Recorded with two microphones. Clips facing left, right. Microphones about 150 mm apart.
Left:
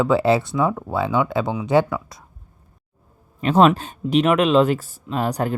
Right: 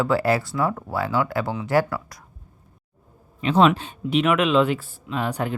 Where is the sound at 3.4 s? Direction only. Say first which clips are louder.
Left 3 dB; 45° left (ahead or behind).